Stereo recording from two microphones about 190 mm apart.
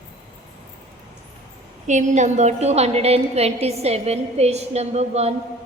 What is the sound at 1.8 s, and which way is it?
A woman's voice, 40° right (ahead or behind).